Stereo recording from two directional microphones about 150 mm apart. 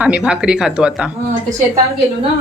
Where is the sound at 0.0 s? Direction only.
10° right (ahead or behind).